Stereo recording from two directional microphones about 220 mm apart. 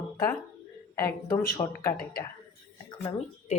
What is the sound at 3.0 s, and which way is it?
Speech, 30° left (ahead or behind).